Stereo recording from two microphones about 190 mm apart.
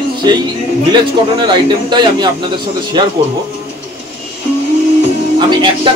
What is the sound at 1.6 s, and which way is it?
Speech, 25° right (ahead or behind).